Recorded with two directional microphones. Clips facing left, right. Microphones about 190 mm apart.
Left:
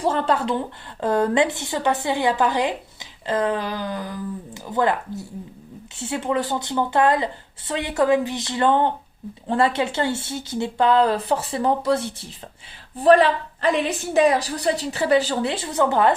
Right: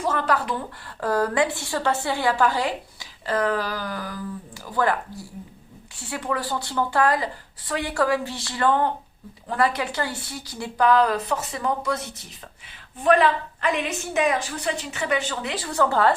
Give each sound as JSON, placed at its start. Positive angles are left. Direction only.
{"t": 0.0, "sound": "a woman's voice", "side_deg": 30}